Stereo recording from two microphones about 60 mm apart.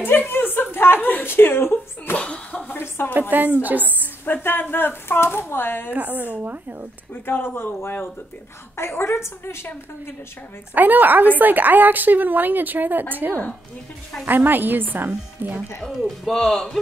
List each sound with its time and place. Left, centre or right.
0.0 s a sound: left
2.1 s slap: centre
2.5 s a sound: left
3.2 s a woman's voice: right
4.0 s speech: left
5.9 s a woman's voice: right
7.2 s speech: left
8.7 s a woman's voice: left
10.7 s a woman's voice: right
16.3 s a man's voice: centre